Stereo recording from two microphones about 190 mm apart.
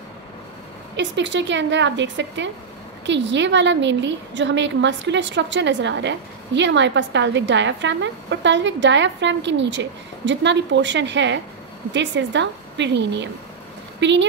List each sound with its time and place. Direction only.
0.9 s a woman's voice: 70° right (ahead or behind)